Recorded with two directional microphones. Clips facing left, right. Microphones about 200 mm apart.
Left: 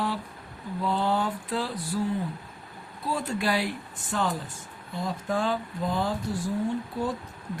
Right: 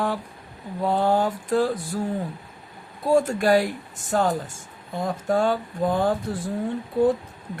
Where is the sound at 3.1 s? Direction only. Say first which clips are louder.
Right 9 dB; 45° right (ahead or behind).